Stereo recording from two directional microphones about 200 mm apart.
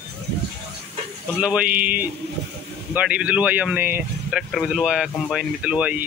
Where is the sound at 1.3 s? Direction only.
5° right (ahead or behind).